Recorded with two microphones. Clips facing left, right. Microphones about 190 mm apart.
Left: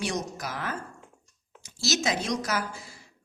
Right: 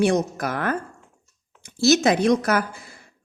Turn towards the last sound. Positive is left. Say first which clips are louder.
# right 7 dB
turn(degrees=-55)  # may be behind; listen again after turning